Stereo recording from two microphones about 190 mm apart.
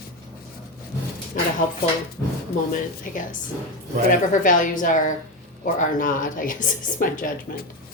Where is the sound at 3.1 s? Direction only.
45° left (ahead or behind).